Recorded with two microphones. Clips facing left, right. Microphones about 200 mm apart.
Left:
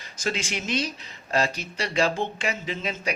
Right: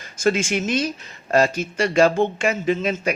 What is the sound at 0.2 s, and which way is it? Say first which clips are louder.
Speech: right 9 dB; 50° right (ahead or behind).